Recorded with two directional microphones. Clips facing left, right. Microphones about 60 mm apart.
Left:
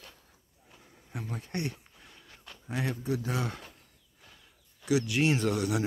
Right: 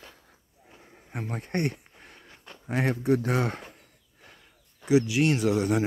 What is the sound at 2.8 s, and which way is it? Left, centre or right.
Speech, right.